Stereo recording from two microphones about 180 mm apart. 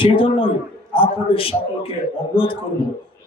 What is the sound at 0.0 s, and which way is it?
A man's voice, 30° left (ahead or behind).